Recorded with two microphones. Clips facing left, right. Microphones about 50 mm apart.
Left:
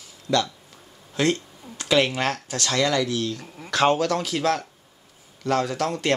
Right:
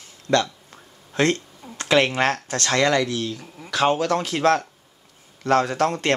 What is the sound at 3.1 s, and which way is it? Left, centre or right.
Speech, centre.